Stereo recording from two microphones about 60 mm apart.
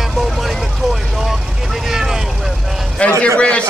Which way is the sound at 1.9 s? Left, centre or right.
Centre.